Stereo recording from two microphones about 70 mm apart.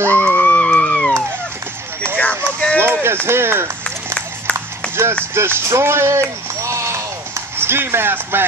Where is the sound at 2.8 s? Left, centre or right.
Right.